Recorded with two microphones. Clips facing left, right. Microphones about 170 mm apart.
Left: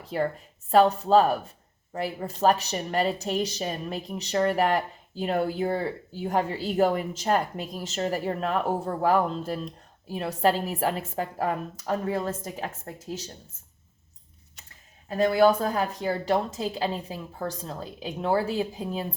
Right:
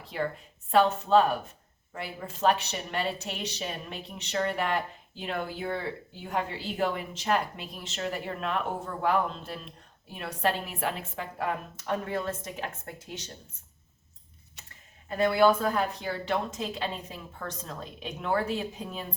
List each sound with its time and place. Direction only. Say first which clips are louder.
0.0 s a woman's voice: left 4 dB; 40° left (ahead or behind)
15.2 s speech: left 2 dB; 40° left (ahead or behind)